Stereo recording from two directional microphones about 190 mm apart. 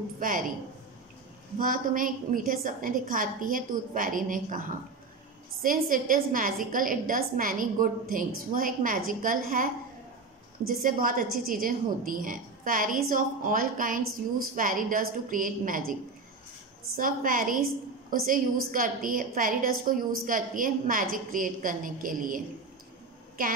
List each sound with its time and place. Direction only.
0.2 s a woman's voice: 45° right (ahead or behind)
1.6 s a woman's voice: 45° right (ahead or behind)
10.7 s a woman's voice: 45° right (ahead or behind)